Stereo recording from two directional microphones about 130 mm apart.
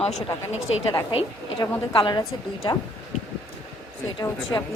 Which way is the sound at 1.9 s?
40° left (ahead or behind).